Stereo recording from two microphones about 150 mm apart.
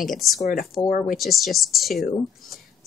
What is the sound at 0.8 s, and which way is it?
Speech, 70° left (ahead or behind).